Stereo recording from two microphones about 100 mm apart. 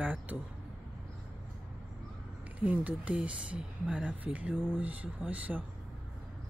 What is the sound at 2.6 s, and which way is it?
Speech, 15° right (ahead or behind).